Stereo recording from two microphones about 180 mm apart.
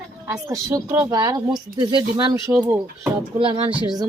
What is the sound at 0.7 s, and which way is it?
Speech, 15° right (ahead or behind).